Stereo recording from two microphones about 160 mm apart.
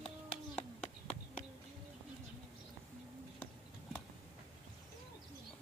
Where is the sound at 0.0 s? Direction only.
35° left (ahead or behind).